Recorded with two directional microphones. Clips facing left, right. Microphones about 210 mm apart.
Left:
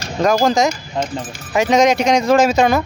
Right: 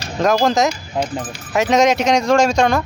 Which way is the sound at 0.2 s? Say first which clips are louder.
Left 1 dB; centre (ahead or behind).